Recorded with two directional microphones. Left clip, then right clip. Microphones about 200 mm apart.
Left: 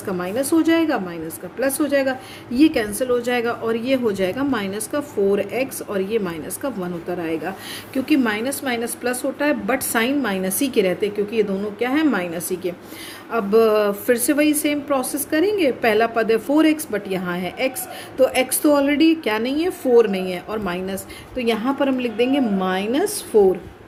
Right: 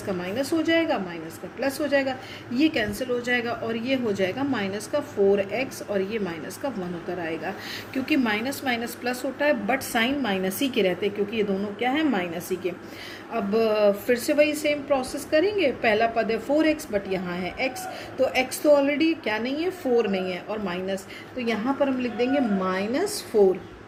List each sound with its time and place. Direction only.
0.2 s a woman's voice: 55° left (ahead or behind)